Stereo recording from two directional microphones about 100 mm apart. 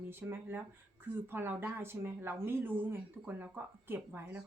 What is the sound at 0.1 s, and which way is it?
Speech, 20° right (ahead or behind).